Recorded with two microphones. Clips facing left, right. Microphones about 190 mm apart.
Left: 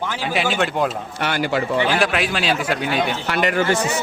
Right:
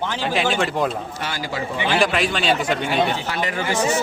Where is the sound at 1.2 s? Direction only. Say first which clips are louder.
Left 10 dB; 65° left (ahead or behind).